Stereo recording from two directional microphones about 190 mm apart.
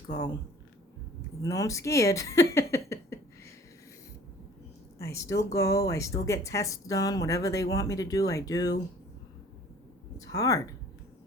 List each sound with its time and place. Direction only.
0.1 s speech: 20° left (ahead or behind)
1.4 s a sound: 15° left (ahead or behind)
4.9 s speech: 15° left (ahead or behind)
10.2 s a woman's voice: 20° left (ahead or behind)